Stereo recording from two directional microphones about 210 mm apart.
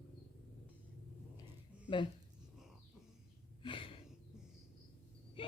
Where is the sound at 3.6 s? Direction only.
25° left (ahead or behind).